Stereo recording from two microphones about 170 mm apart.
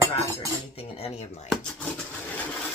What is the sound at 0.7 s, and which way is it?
Speech, 35° left (ahead or behind).